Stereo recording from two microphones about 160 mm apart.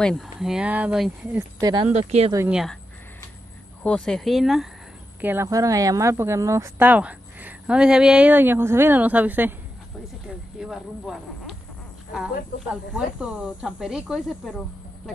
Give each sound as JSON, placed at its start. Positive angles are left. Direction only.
{"t": 0.0, "sound": "speech", "side_deg": 0}
{"t": 1.6, "sound": "speech", "side_deg": -25}
{"t": 1.9, "sound": "speech", "side_deg": -45}
{"t": 2.5, "sound": "speech", "side_deg": 0}
{"t": 3.8, "sound": "speech", "side_deg": 5}
{"t": 5.2, "sound": "speech", "side_deg": -15}
{"t": 10.6, "sound": "speech", "side_deg": -5}
{"t": 12.9, "sound": "speech", "side_deg": -5}